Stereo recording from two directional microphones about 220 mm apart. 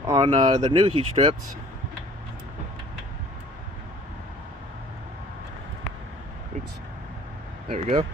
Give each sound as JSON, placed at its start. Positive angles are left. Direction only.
{"t": 0.1, "sound": "speech", "side_deg": -30}
{"t": 7.7, "sound": "speech", "side_deg": -30}